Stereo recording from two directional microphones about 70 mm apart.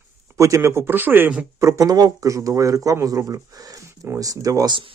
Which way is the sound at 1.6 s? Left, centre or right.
Right.